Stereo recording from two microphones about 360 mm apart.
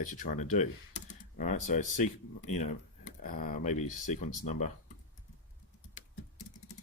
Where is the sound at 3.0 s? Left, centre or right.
Left.